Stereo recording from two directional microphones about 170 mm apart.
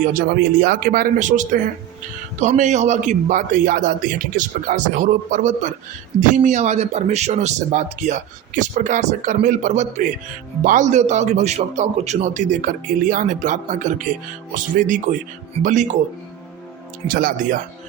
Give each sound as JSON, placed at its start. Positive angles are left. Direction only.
{"t": 0.0, "sound": "a man's voice", "side_deg": -55}
{"t": 17.1, "sound": "speech", "side_deg": -55}